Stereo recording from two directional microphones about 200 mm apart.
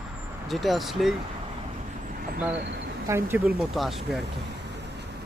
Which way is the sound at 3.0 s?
10° right (ahead or behind).